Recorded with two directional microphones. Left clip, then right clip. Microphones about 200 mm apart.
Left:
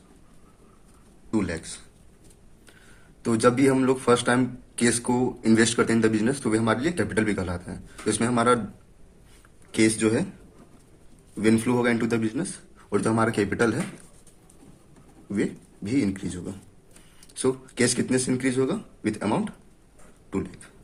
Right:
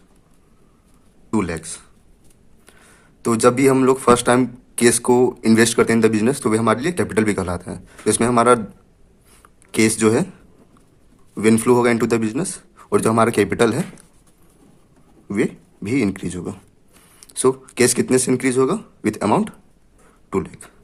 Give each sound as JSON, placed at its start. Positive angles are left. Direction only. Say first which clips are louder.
{"t": 1.3, "sound": "speech", "louder": "right 5 dB", "side_deg": -50}
{"t": 3.2, "sound": "a man's voice", "louder": "right 6 dB", "side_deg": -50}
{"t": 9.7, "sound": "a man's voice", "louder": "right 6 dB", "side_deg": -50}
{"t": 11.3, "sound": "a man's voice", "louder": "right 8 dB", "side_deg": -50}
{"t": 15.3, "sound": "a man's voice", "louder": "right 7 dB", "side_deg": -45}